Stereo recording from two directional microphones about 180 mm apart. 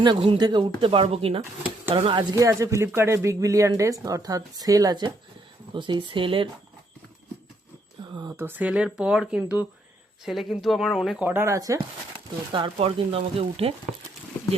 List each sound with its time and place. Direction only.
0.0 s speech: 25° right (ahead or behind)
1.4 s speech: 10° right (ahead or behind)
2.0 s speech: 30° right (ahead or behind)
2.3 s speech: 15° right (ahead or behind)
8.4 s speech: 10° right (ahead or behind)
12.5 s speech: 30° right (ahead or behind)